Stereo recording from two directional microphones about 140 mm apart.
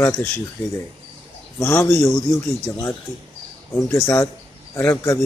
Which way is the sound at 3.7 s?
20° left (ahead or behind).